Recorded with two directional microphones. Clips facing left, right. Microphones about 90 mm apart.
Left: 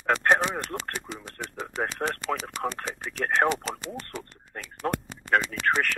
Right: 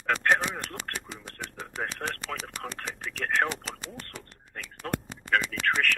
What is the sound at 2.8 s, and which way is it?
Speech, 35° left (ahead or behind).